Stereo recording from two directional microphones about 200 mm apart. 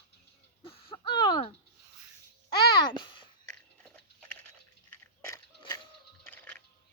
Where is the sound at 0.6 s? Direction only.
30° left (ahead or behind).